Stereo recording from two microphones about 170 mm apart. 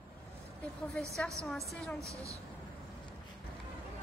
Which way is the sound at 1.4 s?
Centre (ahead or behind).